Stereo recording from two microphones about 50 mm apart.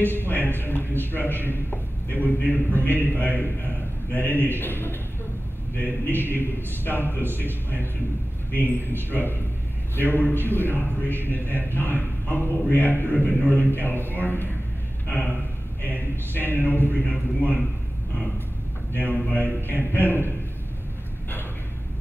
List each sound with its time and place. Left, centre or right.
0.3 s a man's voice: left
5.8 s a man's voice: left
8.6 s a man's voice: left
16.3 s a man's voice: left
18.9 s a man's voice: left